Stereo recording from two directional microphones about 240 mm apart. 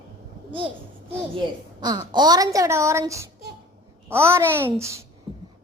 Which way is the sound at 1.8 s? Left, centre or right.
Centre.